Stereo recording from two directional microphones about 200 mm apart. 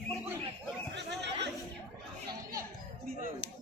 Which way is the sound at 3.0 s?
45° right (ahead or behind).